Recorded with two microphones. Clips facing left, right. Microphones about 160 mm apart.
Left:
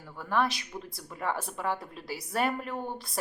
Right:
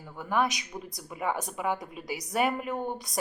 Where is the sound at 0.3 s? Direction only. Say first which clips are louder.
Right 1 dB; 15° right (ahead or behind).